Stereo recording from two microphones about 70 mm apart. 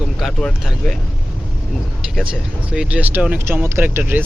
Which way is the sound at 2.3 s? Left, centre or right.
Centre.